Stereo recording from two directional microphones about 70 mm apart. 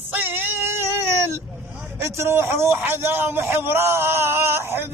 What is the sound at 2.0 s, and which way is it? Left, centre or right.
A man's voice, right.